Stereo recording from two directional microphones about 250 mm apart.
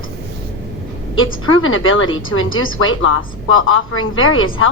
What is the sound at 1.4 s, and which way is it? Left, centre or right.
Speech, left.